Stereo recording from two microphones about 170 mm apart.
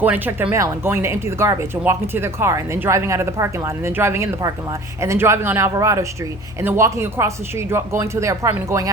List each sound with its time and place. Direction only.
0.0 s speech: 10° right (ahead or behind)